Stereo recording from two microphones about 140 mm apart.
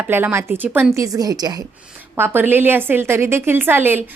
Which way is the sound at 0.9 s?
25° right (ahead or behind).